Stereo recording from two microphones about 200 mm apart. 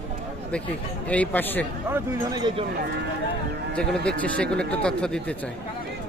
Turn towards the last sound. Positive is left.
turn(degrees=5)  # may be behind; listen again after turning